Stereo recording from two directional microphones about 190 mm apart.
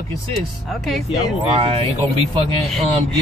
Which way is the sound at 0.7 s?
Centre (ahead or behind).